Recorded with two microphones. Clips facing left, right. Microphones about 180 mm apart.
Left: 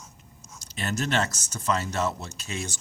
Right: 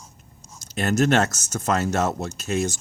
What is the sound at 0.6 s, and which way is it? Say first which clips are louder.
Speech: right 9 dB; 45° right (ahead or behind).